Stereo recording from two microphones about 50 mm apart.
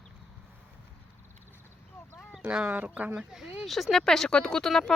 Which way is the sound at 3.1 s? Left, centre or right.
Centre.